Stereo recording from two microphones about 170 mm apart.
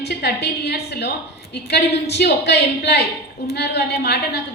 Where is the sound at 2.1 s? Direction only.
80° left.